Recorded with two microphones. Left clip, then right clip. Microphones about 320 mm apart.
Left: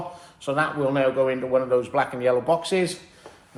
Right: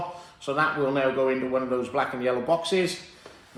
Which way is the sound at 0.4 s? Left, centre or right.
Left.